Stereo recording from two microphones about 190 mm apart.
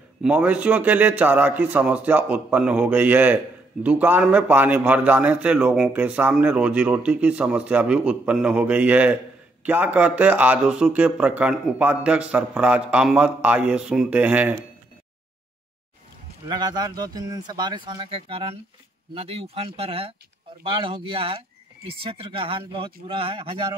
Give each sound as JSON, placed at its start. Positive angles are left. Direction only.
{"t": 0.2, "sound": "a man's voice", "side_deg": -5}
{"t": 16.4, "sound": "speech", "side_deg": -20}